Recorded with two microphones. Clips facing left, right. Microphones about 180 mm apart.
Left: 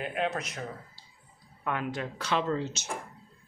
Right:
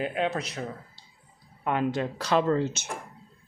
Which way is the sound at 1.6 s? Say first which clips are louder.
Right 6 dB; 25° right (ahead or behind).